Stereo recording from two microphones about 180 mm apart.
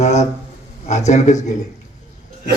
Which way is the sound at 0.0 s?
40° left (ahead or behind).